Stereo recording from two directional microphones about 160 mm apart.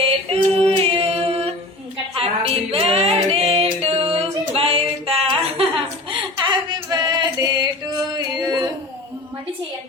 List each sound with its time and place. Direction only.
0.3 s a capella: 35° right (ahead or behind)
2.1 s music: 35° right (ahead or behind)
8.2 s singing: 25° right (ahead or behind)